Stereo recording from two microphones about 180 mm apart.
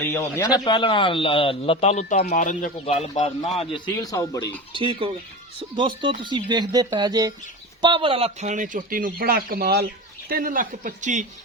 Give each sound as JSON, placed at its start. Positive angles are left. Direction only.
{"t": 0.0, "sound": "a man's voice", "side_deg": 15}
{"t": 4.7, "sound": "a man's voice", "side_deg": -30}